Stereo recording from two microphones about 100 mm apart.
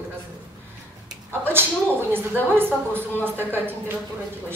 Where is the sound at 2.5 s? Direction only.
20° right (ahead or behind).